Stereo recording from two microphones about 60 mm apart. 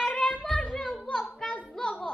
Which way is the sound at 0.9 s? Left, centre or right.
Centre.